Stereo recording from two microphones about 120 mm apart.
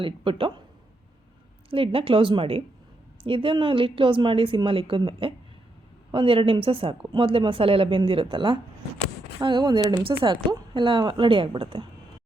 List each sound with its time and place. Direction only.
0.0 s a woman's voice: 45° right (ahead or behind)
1.7 s a woman's voice: 50° right (ahead or behind)